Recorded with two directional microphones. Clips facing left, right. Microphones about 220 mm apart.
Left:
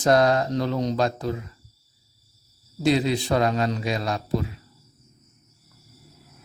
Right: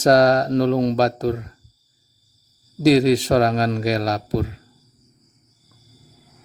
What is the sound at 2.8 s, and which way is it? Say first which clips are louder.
A man's voice: right 7 dB; 35° right (ahead or behind).